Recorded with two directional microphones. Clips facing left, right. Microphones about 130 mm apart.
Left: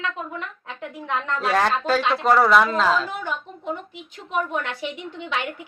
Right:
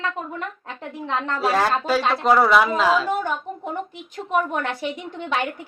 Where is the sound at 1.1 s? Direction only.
30° right (ahead or behind).